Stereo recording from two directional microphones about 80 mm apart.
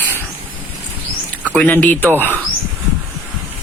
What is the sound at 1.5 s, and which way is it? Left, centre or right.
Speech, centre.